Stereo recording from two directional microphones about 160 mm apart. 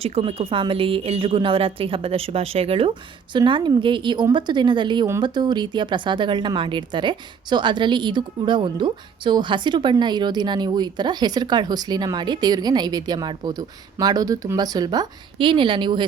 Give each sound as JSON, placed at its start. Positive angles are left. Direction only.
{"t": 0.0, "sound": "a woman's voice", "side_deg": -40}